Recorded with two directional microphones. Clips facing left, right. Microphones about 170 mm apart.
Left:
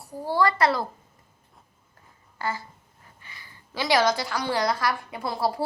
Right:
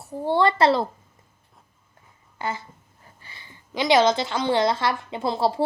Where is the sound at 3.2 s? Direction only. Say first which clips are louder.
Right 1 dB; 25° right (ahead or behind).